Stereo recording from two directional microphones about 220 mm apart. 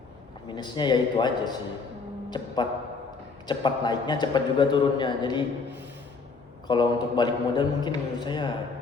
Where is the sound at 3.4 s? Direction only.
20° left (ahead or behind).